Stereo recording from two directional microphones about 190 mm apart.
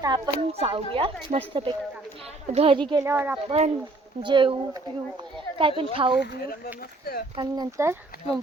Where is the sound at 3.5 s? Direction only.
35° right (ahead or behind).